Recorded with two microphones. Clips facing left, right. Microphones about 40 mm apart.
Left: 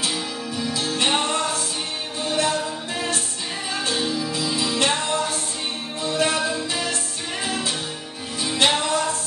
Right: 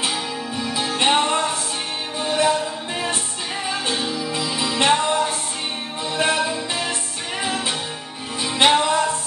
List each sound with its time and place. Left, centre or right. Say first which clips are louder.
0.0 s music: right 2 dB; right
3.7 s music: left 2 dB; centre
4.3 s music: right 1 dB; right